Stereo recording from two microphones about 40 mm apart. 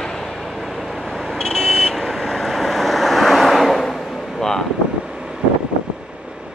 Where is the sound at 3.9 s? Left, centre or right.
Centre.